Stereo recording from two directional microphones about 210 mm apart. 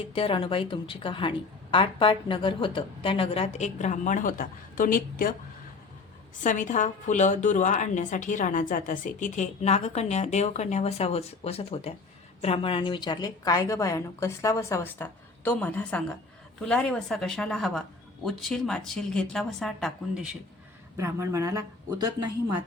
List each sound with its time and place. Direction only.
0.1 s a woman's voice: 25° left (ahead or behind); by 5.3 s 40° left (ahead or behind)
6.4 s a woman's voice: 35° left (ahead or behind); by 20.2 s centre (ahead or behind)
20.9 s speech: 15° right (ahead or behind)